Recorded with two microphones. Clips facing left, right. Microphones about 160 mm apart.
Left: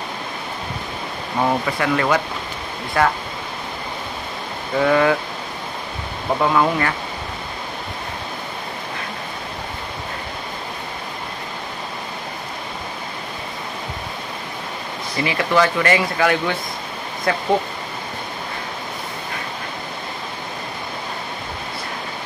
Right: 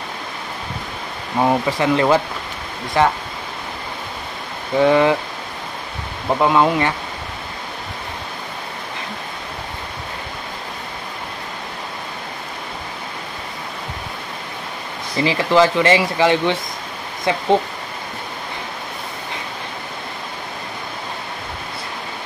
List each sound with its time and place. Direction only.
1.4 s speech: 20° right (ahead or behind)
4.8 s speech: 25° right (ahead or behind)
6.4 s speech: 20° right (ahead or behind)
15.1 s speech: 25° right (ahead or behind)